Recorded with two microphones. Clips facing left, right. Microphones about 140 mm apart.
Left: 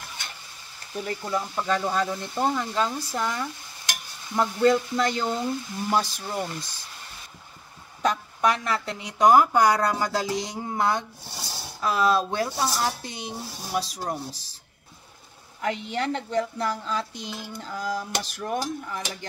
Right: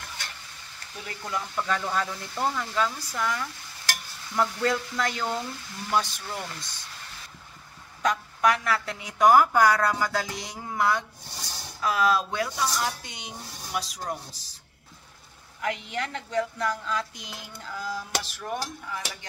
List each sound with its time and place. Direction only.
1.0 s a woman's voice: 25° left (ahead or behind)
8.0 s a woman's voice: 30° left (ahead or behind)
15.6 s speech: 30° left (ahead or behind)